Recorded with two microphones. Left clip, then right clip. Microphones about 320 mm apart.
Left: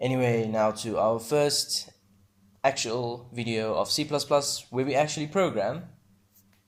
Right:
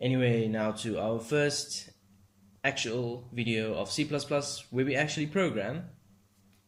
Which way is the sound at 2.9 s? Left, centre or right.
Left.